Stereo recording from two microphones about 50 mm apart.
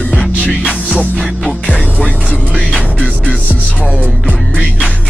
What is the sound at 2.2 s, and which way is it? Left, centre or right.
Music, centre.